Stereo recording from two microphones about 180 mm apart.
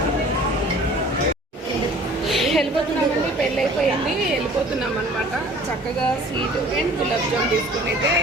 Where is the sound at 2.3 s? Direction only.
Centre (ahead or behind).